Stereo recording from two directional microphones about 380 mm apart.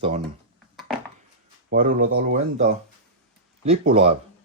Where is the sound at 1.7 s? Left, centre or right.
Right.